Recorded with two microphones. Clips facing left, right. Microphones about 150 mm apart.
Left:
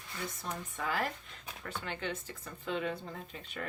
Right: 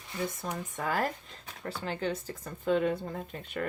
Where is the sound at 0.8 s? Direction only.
45° right (ahead or behind).